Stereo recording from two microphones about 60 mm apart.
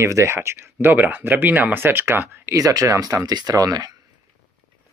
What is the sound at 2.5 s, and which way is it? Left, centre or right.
Speech, right.